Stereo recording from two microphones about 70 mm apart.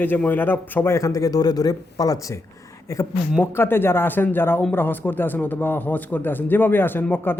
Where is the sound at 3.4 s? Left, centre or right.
Left.